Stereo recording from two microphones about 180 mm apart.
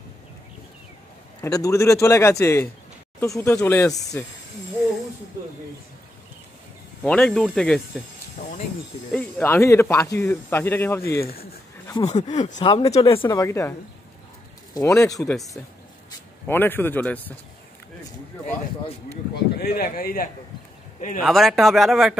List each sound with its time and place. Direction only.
1.4 s speech: 20° left (ahead or behind)
7.0 s speech: 5° left (ahead or behind)
8.4 s a sound: 60° left (ahead or behind)
9.1 s speech: 10° left (ahead or behind)
12.0 s speech: 40° left (ahead or behind)
12.5 s speech: 20° left (ahead or behind)
12.8 s speech: 35° left (ahead or behind)
13.3 s speech: 15° left (ahead or behind)
15.1 s speech: centre (ahead or behind)
16.4 s speech: 10° left (ahead or behind)
19.3 s speech: 60° left (ahead or behind)
21.2 s speech: centre (ahead or behind)